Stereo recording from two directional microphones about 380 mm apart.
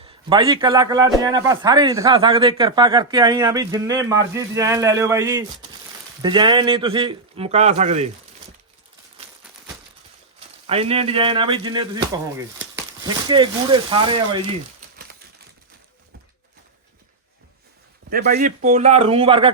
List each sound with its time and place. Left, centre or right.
0.0 s a man's voice: centre
10.7 s a man's voice: centre
18.1 s a man's voice: right